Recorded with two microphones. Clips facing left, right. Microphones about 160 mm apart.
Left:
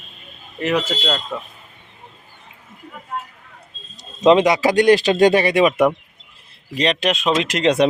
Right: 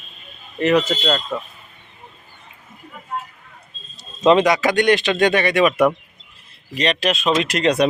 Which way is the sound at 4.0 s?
15° left (ahead or behind).